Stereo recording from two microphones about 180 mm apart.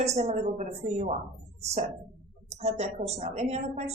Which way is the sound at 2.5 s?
35° right (ahead or behind).